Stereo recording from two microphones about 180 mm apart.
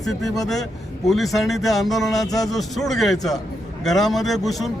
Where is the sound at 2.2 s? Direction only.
20° left (ahead or behind).